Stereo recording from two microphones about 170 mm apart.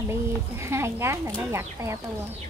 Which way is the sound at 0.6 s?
15° right (ahead or behind).